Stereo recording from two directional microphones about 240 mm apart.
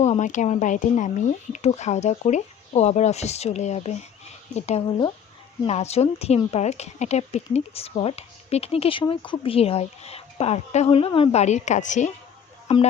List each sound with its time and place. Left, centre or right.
0.0 s a woman's voice: left